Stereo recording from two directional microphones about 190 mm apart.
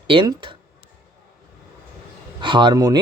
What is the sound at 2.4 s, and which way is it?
Speech, 25° right (ahead or behind).